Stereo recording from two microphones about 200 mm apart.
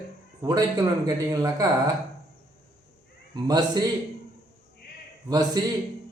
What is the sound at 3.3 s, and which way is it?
Speech, 20° right (ahead or behind).